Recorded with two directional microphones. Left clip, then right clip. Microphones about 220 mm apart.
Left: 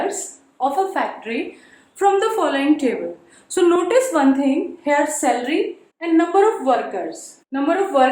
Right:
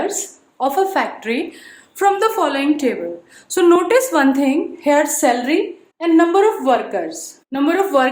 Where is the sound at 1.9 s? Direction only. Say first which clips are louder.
Right 2 dB; 25° right (ahead or behind).